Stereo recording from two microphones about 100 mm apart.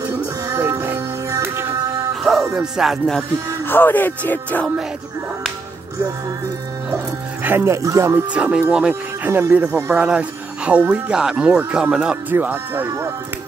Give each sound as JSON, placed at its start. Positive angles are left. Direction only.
{"t": 0.5, "sound": "music", "side_deg": -25}
{"t": 2.5, "sound": "music", "side_deg": -5}
{"t": 3.6, "sound": "speech", "side_deg": 20}
{"t": 7.4, "sound": "speech", "side_deg": -25}
{"t": 8.3, "sound": "speech", "side_deg": -10}
{"t": 9.7, "sound": "speech", "side_deg": -30}
{"t": 9.9, "sound": "speech", "side_deg": -10}
{"t": 12.4, "sound": "speech", "side_deg": -20}